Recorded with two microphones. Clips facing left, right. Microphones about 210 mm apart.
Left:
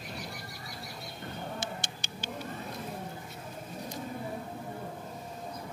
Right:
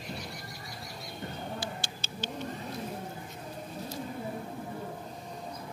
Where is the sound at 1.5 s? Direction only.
15° left (ahead or behind).